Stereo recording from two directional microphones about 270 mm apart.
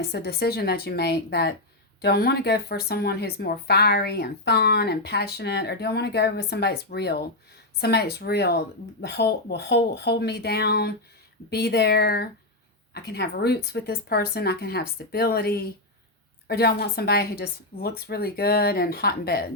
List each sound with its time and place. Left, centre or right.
0.0 s speech: left